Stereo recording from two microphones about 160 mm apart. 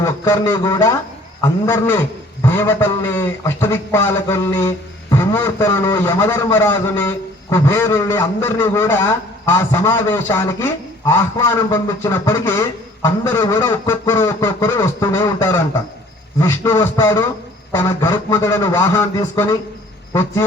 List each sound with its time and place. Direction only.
0.0 s a man's voice: 20° left (ahead or behind)